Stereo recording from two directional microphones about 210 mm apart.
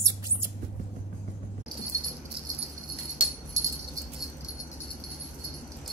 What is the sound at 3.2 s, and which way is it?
Jingle bell, 25° right (ahead or behind).